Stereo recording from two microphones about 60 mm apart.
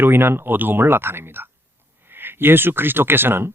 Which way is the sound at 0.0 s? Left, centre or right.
Right.